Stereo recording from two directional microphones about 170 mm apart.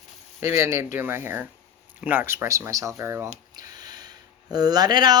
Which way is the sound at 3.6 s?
25° right (ahead or behind).